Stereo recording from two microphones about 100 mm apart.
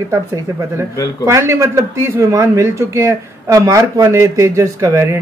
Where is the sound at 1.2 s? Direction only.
30° right (ahead or behind).